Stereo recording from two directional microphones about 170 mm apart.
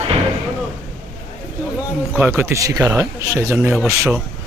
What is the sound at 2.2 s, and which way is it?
Speech, 15° right (ahead or behind).